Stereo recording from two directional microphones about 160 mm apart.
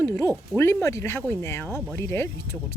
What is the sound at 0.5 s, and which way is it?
Speech, 15° left (ahead or behind).